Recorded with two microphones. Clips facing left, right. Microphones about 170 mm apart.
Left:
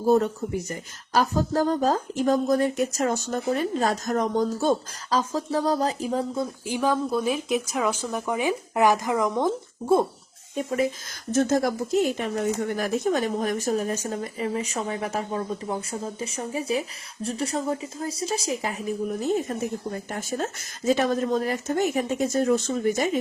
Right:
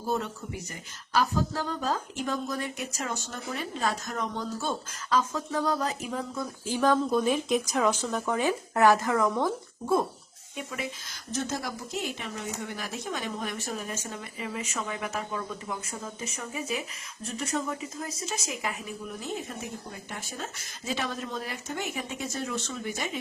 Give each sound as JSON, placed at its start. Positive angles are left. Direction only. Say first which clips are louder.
{"t": 0.0, "sound": "a woman's voice", "louder": "left 10 dB", "side_deg": 45}
{"t": 6.7, "sound": "speech", "louder": "right 1 dB", "side_deg": 10}
{"t": 10.5, "sound": "a woman's voice", "louder": "left 11 dB", "side_deg": 40}